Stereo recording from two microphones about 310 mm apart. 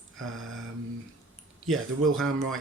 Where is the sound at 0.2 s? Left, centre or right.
Right.